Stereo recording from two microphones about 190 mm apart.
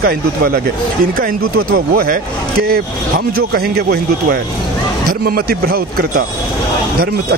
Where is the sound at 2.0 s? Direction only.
50° right (ahead or behind).